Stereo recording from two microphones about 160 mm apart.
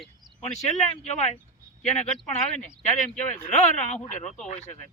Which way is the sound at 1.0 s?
45° left (ahead or behind).